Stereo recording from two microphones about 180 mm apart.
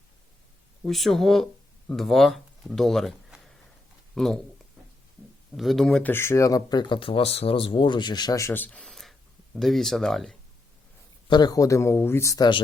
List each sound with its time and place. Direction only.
0.9 s speech: centre (ahead or behind)
5.5 s speech: centre (ahead or behind)
11.3 s speech: 20° left (ahead or behind)